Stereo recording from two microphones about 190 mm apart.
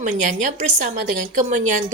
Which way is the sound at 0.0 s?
40° right (ahead or behind).